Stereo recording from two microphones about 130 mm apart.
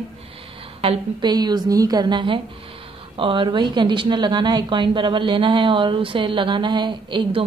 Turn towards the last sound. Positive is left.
turn(degrees=-35)  # may be behind; listen again after turning